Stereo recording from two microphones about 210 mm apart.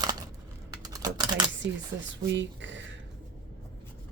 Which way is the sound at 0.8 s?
20° right (ahead or behind).